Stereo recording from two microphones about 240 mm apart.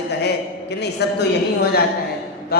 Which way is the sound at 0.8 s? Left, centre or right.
Left.